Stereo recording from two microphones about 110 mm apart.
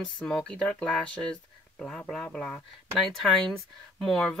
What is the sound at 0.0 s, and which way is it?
Speech, 5° left (ahead or behind).